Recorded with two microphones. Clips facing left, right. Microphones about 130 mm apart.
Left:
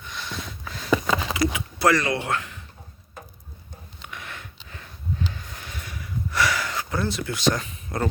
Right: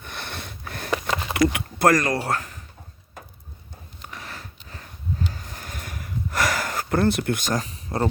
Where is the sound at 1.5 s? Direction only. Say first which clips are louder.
Right 2 dB; 60° right (ahead or behind).